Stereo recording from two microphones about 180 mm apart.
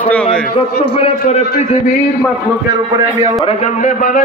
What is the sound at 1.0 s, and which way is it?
Speech, 35° left (ahead or behind).